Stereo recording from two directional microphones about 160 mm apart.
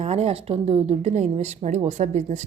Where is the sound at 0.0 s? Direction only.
40° right (ahead or behind).